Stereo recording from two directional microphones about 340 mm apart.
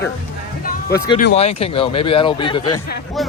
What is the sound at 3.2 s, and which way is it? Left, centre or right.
Speech, centre.